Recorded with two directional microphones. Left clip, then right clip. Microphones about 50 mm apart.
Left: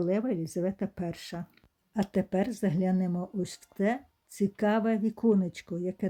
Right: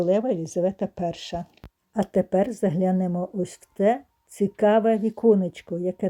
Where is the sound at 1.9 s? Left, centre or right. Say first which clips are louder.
Right 8 dB; right.